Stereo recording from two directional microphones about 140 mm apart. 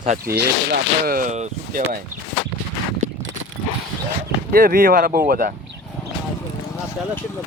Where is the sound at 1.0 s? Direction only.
90° right.